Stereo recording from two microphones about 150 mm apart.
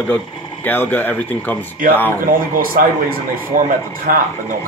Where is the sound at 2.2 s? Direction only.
70° right (ahead or behind).